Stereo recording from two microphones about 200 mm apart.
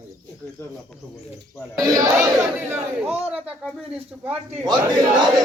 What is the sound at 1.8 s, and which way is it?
Speech, 15° right (ahead or behind).